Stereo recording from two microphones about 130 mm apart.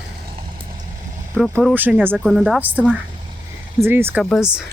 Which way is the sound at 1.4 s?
5° left (ahead or behind).